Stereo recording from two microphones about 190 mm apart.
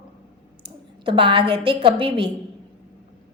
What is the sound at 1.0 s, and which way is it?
A woman's voice, 25° right (ahead or behind).